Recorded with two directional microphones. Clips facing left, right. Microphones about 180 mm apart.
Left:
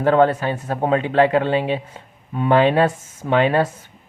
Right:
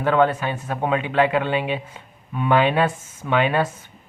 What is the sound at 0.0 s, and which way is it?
Speech, 35° left (ahead or behind).